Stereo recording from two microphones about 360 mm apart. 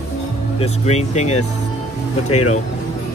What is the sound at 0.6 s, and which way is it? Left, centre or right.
Speech, centre.